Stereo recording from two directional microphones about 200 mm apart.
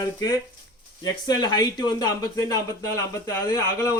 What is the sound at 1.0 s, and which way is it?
Speech, 20° left (ahead or behind).